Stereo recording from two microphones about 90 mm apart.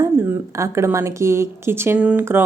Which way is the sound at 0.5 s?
35° right (ahead or behind).